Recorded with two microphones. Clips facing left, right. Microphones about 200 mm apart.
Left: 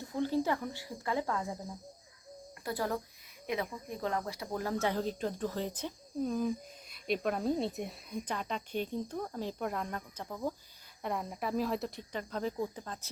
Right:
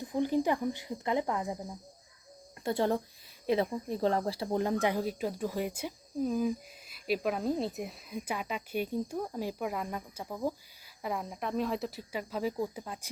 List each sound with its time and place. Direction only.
0.0 s speech: 15° right (ahead or behind)
2.6 s speech: 25° right (ahead or behind); by 13.1 s 10° right (ahead or behind)